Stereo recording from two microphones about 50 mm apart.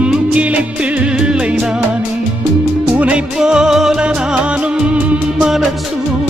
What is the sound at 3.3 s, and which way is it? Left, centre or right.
Music, centre.